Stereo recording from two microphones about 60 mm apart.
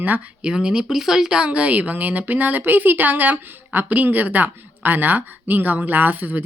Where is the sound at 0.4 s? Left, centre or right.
Centre.